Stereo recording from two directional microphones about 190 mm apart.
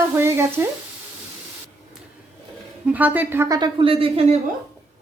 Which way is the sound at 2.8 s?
10° right (ahead or behind).